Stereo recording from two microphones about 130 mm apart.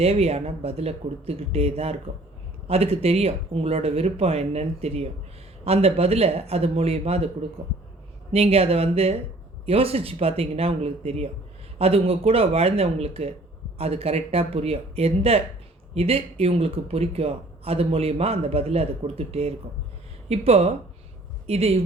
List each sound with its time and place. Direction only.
0.0 s a man's voice: 50° right (ahead or behind)
8.3 s a man's voice: 50° right (ahead or behind)